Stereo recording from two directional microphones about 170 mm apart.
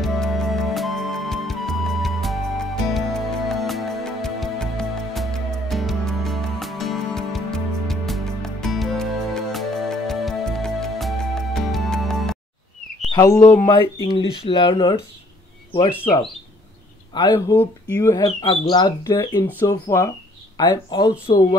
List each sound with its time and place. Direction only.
0.0 s music: centre (ahead or behind)
13.1 s speech: 15° left (ahead or behind)
14.4 s speech: 30° left (ahead or behind)
17.1 s speech: 25° left (ahead or behind); by 18.1 s 10° left (ahead or behind)
18.1 s speech: 25° left (ahead or behind)